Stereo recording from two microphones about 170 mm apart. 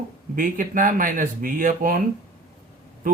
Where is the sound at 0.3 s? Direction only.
55° right (ahead or behind).